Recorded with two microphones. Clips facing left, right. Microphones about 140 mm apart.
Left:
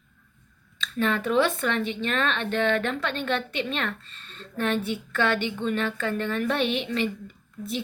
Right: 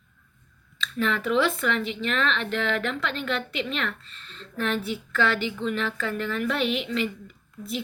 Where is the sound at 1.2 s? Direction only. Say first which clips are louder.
Even; 30° left (ahead or behind).